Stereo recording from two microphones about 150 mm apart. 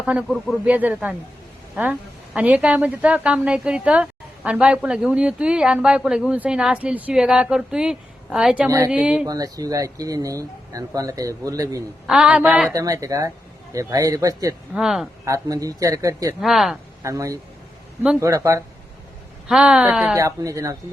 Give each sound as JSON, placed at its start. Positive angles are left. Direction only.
{"t": 0.0, "sound": "a woman's voice", "side_deg": -5}
{"t": 9.2, "sound": "speech", "side_deg": -25}
{"t": 12.0, "sound": "a woman's voice", "side_deg": -5}
{"t": 12.7, "sound": "speech", "side_deg": -20}
{"t": 14.8, "sound": "speech", "side_deg": -5}
{"t": 15.2, "sound": "speech", "side_deg": -20}
{"t": 16.4, "sound": "speech", "side_deg": 0}
{"t": 17.0, "sound": "speech", "side_deg": -20}
{"t": 19.5, "sound": "speech", "side_deg": -5}
{"t": 20.1, "sound": "speech", "side_deg": -20}